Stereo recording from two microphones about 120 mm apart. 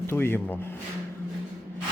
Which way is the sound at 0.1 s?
20° left (ahead or behind).